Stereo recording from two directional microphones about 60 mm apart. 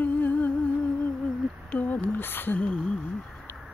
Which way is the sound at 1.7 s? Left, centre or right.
Left.